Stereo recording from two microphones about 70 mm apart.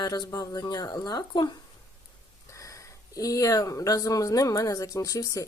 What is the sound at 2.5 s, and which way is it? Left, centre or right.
Speech, left.